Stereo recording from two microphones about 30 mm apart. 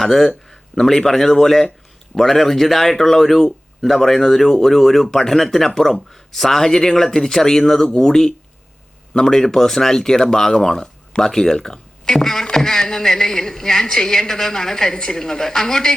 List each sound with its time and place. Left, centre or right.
0.0 s speech: centre